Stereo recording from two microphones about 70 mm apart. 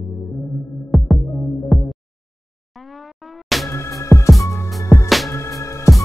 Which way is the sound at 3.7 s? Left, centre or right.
Left.